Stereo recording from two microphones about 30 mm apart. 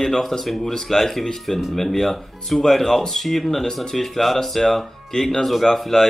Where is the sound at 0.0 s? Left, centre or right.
Centre.